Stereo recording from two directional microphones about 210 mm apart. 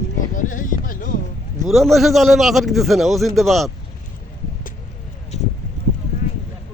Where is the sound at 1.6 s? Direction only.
Centre (ahead or behind).